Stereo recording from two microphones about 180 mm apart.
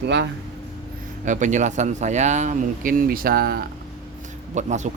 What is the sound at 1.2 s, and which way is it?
Speech, 45° right (ahead or behind).